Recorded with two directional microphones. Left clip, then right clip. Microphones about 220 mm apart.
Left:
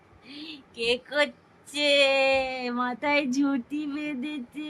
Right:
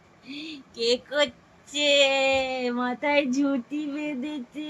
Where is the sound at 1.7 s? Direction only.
20° left (ahead or behind).